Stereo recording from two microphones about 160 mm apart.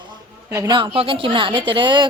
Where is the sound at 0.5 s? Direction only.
25° right (ahead or behind).